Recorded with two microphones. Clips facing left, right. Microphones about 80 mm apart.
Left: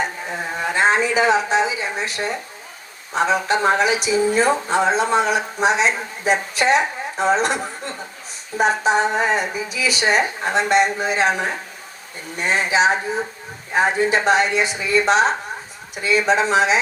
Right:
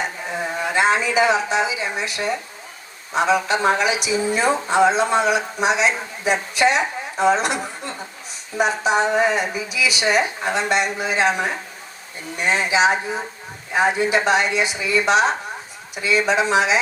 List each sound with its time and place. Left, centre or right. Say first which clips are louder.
0.8 s speech: even; left